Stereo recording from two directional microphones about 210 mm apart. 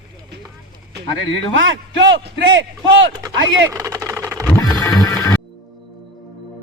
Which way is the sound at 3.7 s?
15° right (ahead or behind).